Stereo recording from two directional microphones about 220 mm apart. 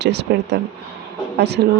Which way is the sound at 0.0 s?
50° right (ahead or behind).